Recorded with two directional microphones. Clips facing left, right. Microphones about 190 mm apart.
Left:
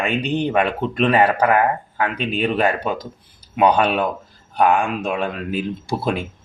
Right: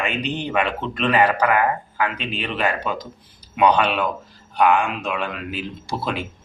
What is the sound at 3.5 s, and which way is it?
Speech, 30° left (ahead or behind).